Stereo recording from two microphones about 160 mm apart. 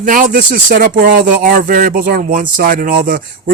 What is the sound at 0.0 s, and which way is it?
Speech, 55° right (ahead or behind).